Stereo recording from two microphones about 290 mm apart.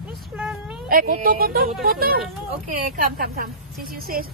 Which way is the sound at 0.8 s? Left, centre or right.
Right.